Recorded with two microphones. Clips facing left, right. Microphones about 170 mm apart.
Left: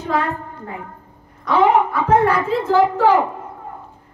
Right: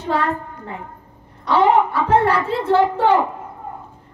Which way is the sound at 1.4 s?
30° right (ahead or behind).